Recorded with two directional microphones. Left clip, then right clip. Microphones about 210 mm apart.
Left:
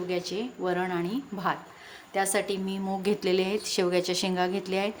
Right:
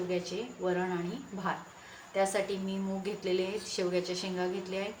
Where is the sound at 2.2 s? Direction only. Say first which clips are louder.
Left 3 dB; 55° left (ahead or behind).